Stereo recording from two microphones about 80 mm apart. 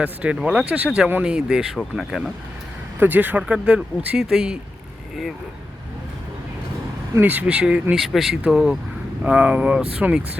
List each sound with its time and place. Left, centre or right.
0.0 s speech: centre
3.0 s speech: right; by 4.5 s centre
7.2 s speech: right